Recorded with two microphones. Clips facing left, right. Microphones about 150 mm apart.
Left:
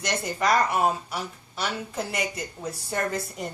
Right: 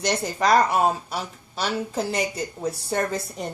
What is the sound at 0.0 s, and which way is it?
Speech, 30° right (ahead or behind).